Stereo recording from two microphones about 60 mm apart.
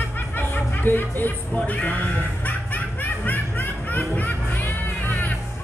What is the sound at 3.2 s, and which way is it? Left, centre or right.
Music, left.